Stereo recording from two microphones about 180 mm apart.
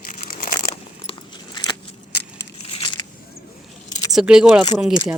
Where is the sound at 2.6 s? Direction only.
30° left (ahead or behind).